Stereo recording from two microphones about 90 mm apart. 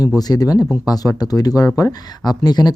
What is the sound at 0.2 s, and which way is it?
Speech, 45° left (ahead or behind).